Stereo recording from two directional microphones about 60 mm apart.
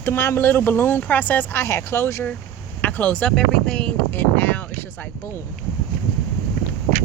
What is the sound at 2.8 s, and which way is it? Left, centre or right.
Speech, left.